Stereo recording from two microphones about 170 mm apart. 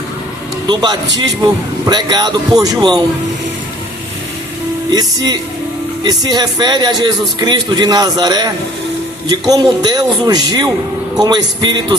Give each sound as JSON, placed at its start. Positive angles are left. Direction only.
{"t": 0.7, "sound": "a man's voice", "side_deg": -25}
{"t": 4.9, "sound": "a man's voice", "side_deg": -25}